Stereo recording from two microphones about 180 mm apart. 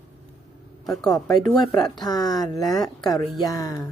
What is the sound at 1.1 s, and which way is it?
Speech, 20° left (ahead or behind).